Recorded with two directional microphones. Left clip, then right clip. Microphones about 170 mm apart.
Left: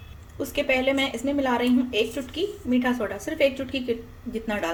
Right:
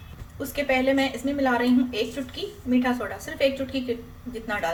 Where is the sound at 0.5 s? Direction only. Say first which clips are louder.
Even; 35° left (ahead or behind).